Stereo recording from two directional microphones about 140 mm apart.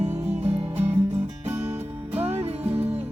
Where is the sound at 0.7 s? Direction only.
15° right (ahead or behind).